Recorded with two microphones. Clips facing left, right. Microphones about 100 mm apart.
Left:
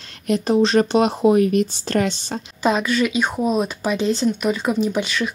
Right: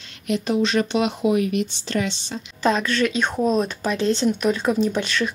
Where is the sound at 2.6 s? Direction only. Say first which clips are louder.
Left 1 dB; 10° left (ahead or behind).